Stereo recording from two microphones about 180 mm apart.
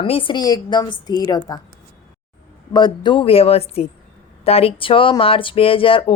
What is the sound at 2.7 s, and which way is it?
A woman's voice, 25° left (ahead or behind).